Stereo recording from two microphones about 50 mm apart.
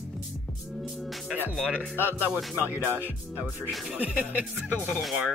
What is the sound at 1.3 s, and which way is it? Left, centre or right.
Speech, right.